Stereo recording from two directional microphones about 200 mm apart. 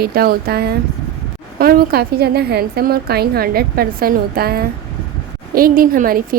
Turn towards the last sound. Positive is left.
turn(degrees=-45)  # may be behind; listen again after turning